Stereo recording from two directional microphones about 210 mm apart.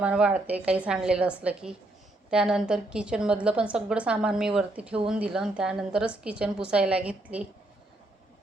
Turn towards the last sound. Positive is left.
turn(degrees=-5)  # may be behind; listen again after turning